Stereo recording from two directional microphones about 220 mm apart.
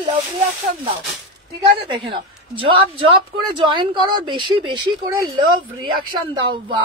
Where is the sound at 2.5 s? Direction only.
25° right (ahead or behind).